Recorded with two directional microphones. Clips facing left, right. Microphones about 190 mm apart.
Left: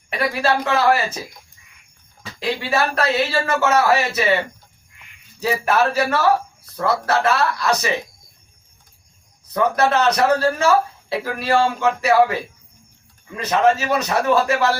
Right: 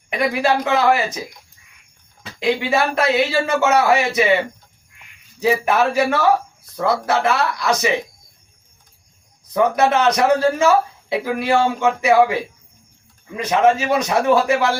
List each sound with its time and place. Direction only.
0.1 s speech: 15° right (ahead or behind)
2.4 s speech: 15° right (ahead or behind)
5.4 s speech: 15° right (ahead or behind)
9.5 s speech: 15° right (ahead or behind)